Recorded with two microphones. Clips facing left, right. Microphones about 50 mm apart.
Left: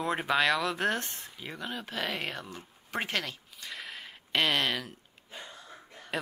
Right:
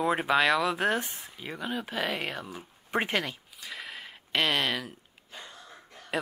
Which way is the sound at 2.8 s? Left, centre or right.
Centre.